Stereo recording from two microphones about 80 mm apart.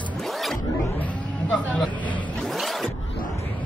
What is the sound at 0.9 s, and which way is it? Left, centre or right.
Vehicle, centre.